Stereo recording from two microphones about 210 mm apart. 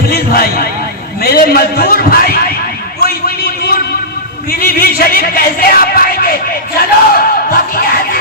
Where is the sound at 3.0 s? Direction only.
45° left (ahead or behind).